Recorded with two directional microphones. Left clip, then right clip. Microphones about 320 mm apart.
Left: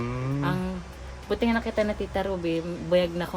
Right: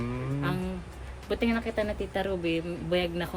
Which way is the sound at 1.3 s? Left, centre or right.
Centre.